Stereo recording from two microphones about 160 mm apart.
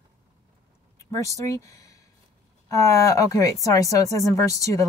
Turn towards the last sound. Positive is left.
turn(degrees=20)  # may be behind; listen again after turning